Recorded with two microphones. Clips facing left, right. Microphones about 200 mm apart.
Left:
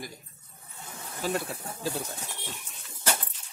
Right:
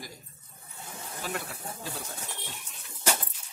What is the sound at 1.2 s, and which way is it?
Speech, 30° left (ahead or behind).